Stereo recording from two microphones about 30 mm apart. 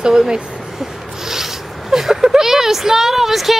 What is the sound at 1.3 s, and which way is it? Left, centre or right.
Speech, centre.